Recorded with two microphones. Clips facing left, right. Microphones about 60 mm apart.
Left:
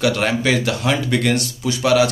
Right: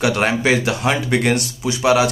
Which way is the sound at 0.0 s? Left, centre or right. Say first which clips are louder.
Right 1 dB; right.